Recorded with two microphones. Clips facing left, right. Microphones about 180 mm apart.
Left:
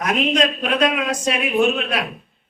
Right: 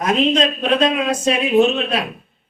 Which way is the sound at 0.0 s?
25° right (ahead or behind).